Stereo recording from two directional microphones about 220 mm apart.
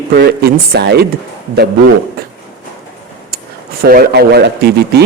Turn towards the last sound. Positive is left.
turn(degrees=-45)  # may be behind; listen again after turning